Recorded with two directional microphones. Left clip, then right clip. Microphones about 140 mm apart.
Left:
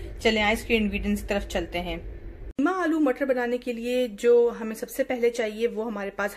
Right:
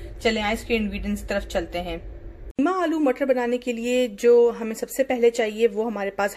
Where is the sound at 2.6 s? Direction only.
15° right (ahead or behind).